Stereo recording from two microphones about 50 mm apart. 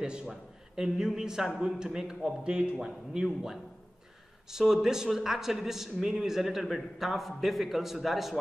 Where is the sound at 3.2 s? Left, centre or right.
Centre.